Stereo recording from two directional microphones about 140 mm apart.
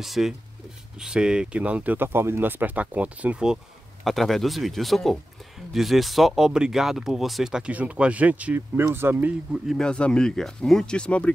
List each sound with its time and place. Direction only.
0.0 s speech: centre (ahead or behind)
9.8 s speech: 5° left (ahead or behind)